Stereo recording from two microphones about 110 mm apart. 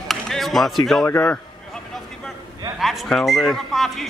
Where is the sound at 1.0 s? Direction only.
20° left (ahead or behind).